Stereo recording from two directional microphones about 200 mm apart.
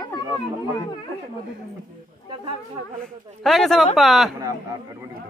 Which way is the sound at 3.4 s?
Centre (ahead or behind).